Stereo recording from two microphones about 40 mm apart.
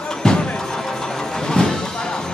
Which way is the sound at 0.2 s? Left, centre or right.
Centre.